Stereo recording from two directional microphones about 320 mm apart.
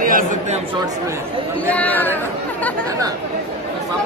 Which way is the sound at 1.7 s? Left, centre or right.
Centre.